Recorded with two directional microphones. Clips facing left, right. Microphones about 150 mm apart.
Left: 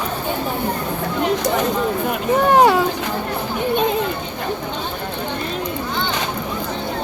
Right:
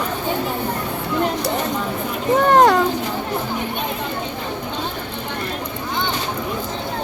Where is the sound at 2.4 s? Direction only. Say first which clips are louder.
Even; 5° left (ahead or behind).